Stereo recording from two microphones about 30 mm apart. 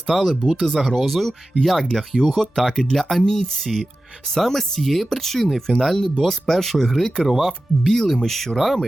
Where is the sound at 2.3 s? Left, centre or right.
Left.